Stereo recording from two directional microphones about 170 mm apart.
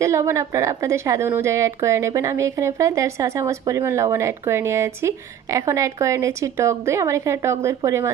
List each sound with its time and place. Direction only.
0.0 s a woman's voice: 15° right (ahead or behind)